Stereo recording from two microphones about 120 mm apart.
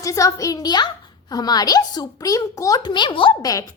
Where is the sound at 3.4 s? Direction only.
30° left (ahead or behind).